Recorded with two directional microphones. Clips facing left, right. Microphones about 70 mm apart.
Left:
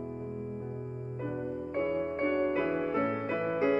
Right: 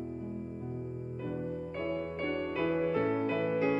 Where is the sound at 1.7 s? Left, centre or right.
Left.